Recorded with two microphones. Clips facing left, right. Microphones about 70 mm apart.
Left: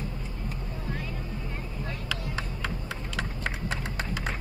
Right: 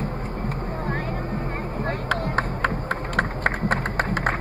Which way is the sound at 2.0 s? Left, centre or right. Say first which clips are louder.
Right 11 dB; right.